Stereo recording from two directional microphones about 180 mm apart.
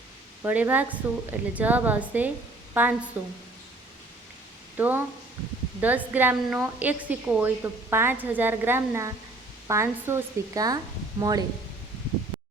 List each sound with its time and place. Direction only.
0.4 s a woman's voice: 10° right (ahead or behind)
4.8 s a woman's voice: 10° right (ahead or behind)